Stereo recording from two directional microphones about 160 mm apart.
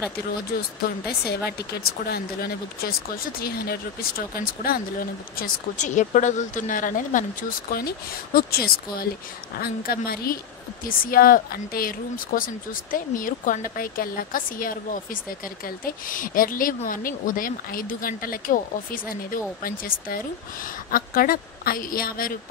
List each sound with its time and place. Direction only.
1.0 s speech: 80° left; by 22.4 s 65° left (ahead or behind)